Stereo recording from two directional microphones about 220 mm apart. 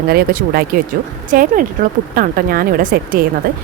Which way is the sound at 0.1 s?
45° right (ahead or behind).